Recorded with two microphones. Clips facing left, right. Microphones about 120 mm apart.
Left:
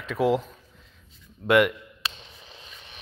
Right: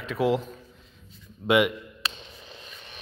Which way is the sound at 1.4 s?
10° right (ahead or behind).